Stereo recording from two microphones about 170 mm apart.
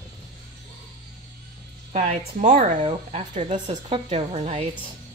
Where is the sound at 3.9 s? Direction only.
30° right (ahead or behind).